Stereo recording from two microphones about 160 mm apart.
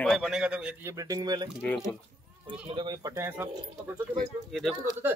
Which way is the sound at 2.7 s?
30° right (ahead or behind).